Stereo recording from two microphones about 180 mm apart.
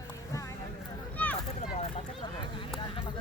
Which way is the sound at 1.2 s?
10° left (ahead or behind).